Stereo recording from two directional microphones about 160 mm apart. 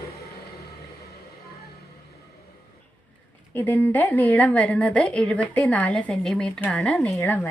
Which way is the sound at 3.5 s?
10° left (ahead or behind).